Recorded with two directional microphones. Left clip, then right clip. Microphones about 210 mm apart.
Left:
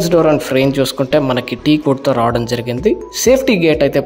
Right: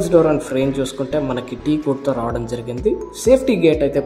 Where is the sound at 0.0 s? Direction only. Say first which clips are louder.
Left 3 dB; 30° left (ahead or behind).